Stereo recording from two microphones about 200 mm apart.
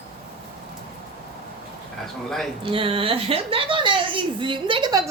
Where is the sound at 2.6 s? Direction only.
25° right (ahead or behind).